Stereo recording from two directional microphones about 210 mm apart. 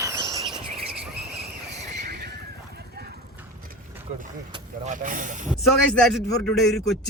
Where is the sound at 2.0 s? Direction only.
45° right (ahead or behind).